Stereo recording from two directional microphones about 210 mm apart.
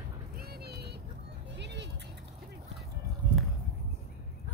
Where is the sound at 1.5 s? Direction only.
55° right (ahead or behind).